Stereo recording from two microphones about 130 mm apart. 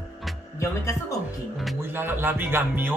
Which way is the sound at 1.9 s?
15° right (ahead or behind).